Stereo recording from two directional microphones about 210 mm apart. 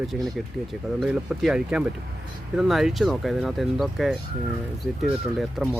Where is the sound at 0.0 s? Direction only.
Centre (ahead or behind).